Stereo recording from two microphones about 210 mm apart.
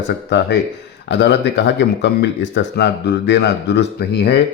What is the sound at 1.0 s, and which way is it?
Speech, 55° left (ahead or behind).